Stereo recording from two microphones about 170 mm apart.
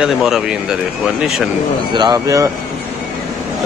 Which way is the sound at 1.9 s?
25° right (ahead or behind).